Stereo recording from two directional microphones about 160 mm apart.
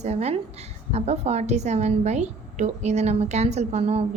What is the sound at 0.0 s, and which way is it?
A woman's voice, 45° right (ahead or behind).